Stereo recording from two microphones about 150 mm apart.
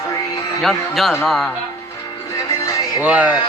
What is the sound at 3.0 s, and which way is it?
Speech, 10° right (ahead or behind).